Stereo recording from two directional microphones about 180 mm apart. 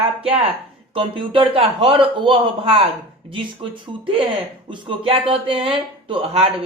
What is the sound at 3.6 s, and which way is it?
A man's voice, 30° right (ahead or behind).